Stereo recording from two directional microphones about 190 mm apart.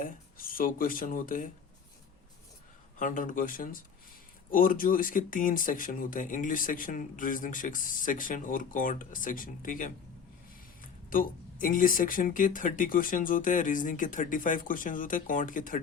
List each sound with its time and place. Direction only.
0.0 s speech: 50° left (ahead or behind)
3.0 s speech: 45° left (ahead or behind)
11.1 s speech: 45° left (ahead or behind)